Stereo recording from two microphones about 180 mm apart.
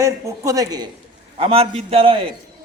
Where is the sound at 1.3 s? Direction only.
30° right (ahead or behind).